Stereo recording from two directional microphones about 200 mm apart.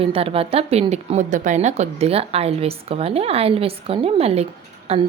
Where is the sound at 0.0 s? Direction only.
30° right (ahead or behind).